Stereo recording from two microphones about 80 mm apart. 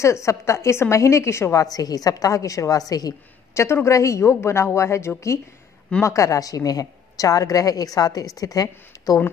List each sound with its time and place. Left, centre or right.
0.0 s a woman's voice: left
3.5 s a woman's voice: left